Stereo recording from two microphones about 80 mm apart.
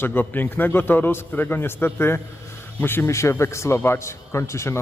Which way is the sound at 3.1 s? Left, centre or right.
Left.